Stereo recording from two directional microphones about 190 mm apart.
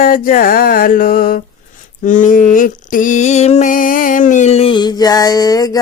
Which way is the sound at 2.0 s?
45° left (ahead or behind).